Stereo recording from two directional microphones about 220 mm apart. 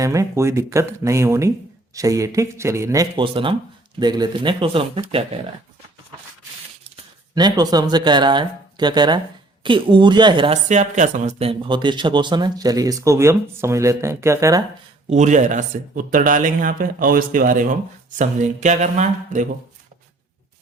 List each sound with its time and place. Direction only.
0.0 s speech: 15° right (ahead or behind)
7.3 s speech: 20° right (ahead or behind)
15.1 s speech: 35° right (ahead or behind)